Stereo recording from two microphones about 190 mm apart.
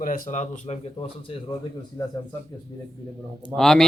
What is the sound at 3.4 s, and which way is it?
Speech, 5° left (ahead or behind).